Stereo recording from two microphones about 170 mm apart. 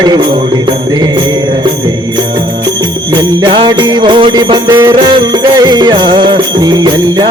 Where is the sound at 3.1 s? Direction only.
30° right (ahead or behind).